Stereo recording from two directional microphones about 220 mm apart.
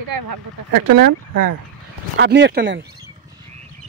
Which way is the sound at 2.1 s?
50° right (ahead or behind).